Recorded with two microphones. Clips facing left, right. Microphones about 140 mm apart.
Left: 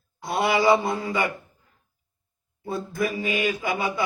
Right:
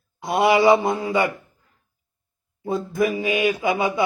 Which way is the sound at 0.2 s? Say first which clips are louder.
Right 5 dB; 20° right (ahead or behind).